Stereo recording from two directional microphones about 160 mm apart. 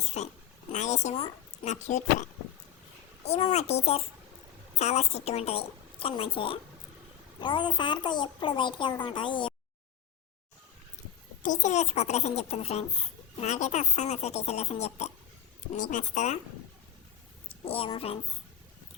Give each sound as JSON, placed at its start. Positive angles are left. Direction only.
{"t": 0.0, "sound": "a sound", "side_deg": 45}
{"t": 0.7, "sound": "a child's voice", "side_deg": 45}
{"t": 3.2, "sound": "a woman's voice", "side_deg": 40}
{"t": 11.4, "sound": "a child's voice", "side_deg": 50}
{"t": 17.5, "sound": "a woman's voice", "side_deg": 35}